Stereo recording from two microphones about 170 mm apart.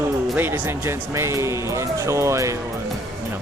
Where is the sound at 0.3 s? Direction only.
10° right (ahead or behind).